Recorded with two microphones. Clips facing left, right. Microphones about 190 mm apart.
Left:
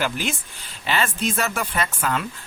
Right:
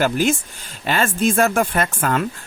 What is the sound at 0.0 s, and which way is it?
Speech, 45° right (ahead or behind).